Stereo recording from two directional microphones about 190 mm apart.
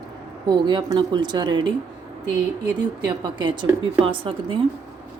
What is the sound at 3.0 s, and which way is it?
A woman's voice, 25° right (ahead or behind).